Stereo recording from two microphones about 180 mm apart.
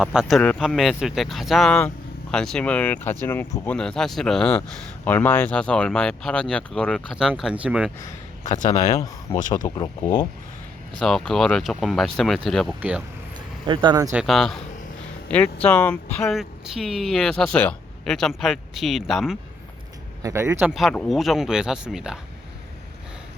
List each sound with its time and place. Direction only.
0.0 s speech: 5° right (ahead or behind)
8.4 s speech: 45° left (ahead or behind)
9.0 s speech: 20° left (ahead or behind)
11.0 s speech: centre (ahead or behind)
13.7 s speech: 25° right (ahead or behind)
14.1 s speech: centre (ahead or behind)
20.2 s speech: 15° right (ahead or behind)